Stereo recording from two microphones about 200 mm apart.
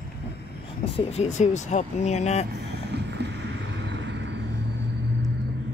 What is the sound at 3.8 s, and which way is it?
Vehicle, 60° right (ahead or behind).